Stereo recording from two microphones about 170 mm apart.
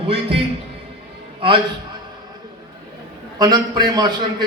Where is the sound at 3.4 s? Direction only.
25° right (ahead or behind).